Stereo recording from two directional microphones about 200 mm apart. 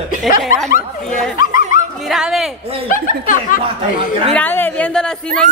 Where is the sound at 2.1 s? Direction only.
Centre (ahead or behind).